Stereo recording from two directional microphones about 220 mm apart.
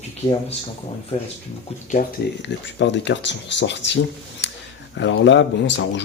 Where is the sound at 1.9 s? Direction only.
35° left (ahead or behind).